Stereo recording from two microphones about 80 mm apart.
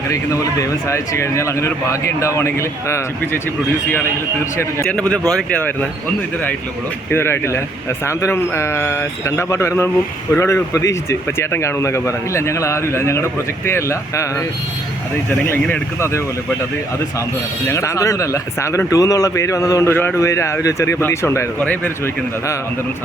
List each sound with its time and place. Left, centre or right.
0.1 s speech: left
4.9 s speech: centre
7.1 s speech: left
17.7 s speech: left
19.9 s speech: left
20.1 s speech: left
21.6 s speech: left